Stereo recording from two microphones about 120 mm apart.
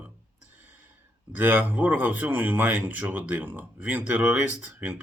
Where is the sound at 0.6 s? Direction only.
15° right (ahead or behind).